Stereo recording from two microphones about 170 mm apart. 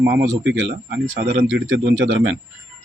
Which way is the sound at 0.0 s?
75° right (ahead or behind).